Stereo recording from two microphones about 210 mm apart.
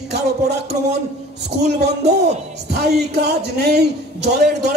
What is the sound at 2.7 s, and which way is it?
A man's voice, 50° right (ahead or behind).